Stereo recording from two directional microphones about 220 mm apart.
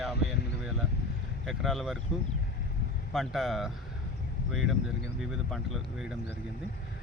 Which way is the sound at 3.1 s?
Centre (ahead or behind).